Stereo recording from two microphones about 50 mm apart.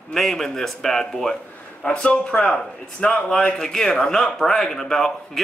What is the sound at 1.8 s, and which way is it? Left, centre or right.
A man's voice, centre.